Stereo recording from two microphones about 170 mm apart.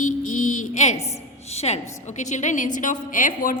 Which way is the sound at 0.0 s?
50° left (ahead or behind).